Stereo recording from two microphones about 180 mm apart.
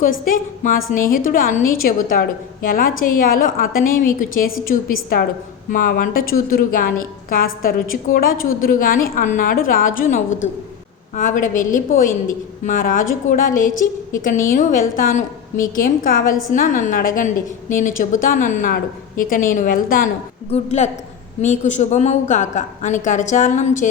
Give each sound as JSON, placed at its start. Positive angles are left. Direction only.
{"t": 0.0, "sound": "a woman's voice", "side_deg": 50}
{"t": 20.5, "sound": "a woman's voice", "side_deg": 40}